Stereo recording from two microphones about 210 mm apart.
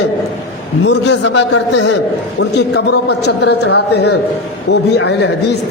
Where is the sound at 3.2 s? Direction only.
50° left (ahead or behind).